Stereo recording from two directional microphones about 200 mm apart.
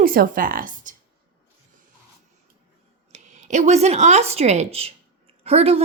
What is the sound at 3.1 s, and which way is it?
Speech, 35° right (ahead or behind).